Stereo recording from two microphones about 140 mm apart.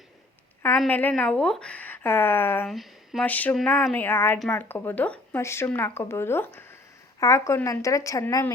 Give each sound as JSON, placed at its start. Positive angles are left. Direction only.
{"t": 0.9, "sound": "speech", "side_deg": 10}
{"t": 2.6, "sound": "speech", "side_deg": 0}
{"t": 3.2, "sound": "speech", "side_deg": 10}